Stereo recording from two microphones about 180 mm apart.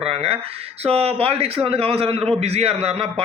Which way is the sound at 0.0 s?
35° right (ahead or behind).